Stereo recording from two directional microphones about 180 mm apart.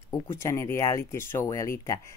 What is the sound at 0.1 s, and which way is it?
Speech, 15° left (ahead or behind).